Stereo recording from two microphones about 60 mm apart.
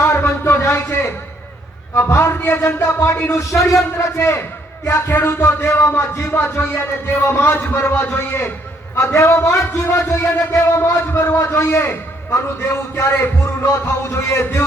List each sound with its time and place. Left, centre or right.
0.0 s a sound: left
2.0 s a man's voice: left
3.3 s a man's voice: left
3.9 s a man's voice: left
9.0 s a man's voice: left